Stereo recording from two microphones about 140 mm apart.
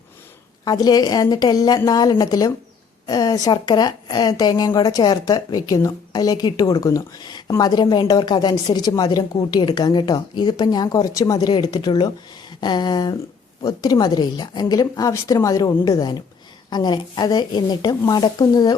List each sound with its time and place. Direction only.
0.6 s a woman's voice: 30° left (ahead or behind)